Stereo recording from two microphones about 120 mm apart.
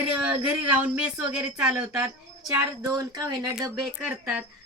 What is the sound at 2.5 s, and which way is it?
Speech, 30° right (ahead or behind).